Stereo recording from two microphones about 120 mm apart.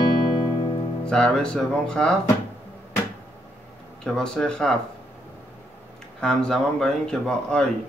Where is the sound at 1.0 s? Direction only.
5° left (ahead or behind).